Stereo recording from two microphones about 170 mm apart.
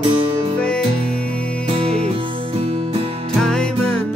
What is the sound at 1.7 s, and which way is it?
Music, 35° right (ahead or behind).